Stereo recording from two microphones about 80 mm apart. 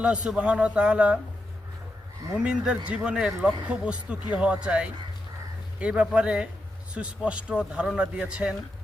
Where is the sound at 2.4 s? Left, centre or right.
Centre.